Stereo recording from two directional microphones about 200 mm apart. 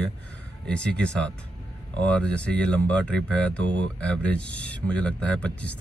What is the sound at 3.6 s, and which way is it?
Speech, 65° right (ahead or behind).